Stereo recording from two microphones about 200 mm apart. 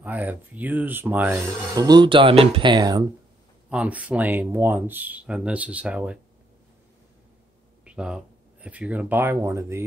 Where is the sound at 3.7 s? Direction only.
5° right (ahead or behind).